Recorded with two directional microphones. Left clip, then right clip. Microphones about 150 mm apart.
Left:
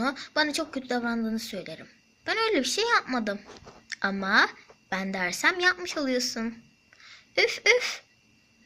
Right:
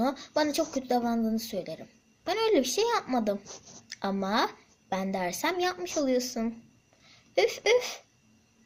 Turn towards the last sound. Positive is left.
turn(degrees=-10)  # may be behind; listen again after turning